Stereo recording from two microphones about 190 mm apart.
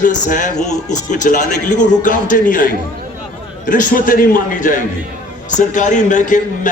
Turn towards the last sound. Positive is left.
turn(degrees=40)  # may be behind; listen again after turning